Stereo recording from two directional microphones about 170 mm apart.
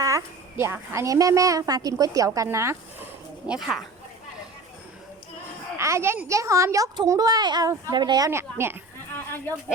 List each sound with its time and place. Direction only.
0.0 s a woman's voice: 15° right (ahead or behind)
3.4 s speech: 5° right (ahead or behind)
5.7 s a woman's voice: 15° right (ahead or behind)